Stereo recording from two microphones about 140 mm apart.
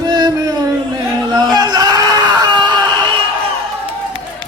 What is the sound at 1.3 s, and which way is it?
Speech, 30° right (ahead or behind).